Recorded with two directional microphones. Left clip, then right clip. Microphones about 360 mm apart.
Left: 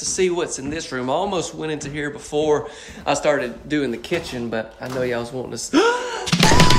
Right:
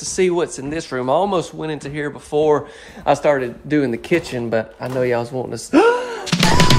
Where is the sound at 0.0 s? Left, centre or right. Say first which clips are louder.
Right 3 dB; centre.